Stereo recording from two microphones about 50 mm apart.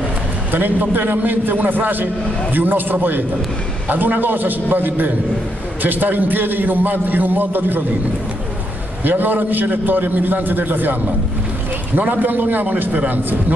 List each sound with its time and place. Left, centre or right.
0.5 s a man's voice: right
9.0 s a man's voice: right